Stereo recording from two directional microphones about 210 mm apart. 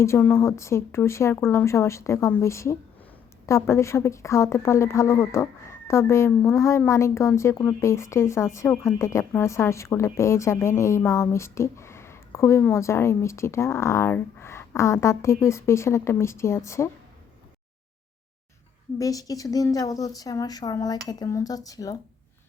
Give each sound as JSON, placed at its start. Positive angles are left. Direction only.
{"t": 0.0, "sound": "speech", "side_deg": 10}
{"t": 18.9, "sound": "speech", "side_deg": 15}